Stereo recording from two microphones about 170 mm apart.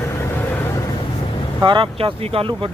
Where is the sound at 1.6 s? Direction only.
30° right (ahead or behind).